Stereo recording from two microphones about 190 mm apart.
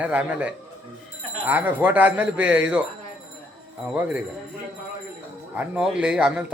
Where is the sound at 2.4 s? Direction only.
70° right (ahead or behind).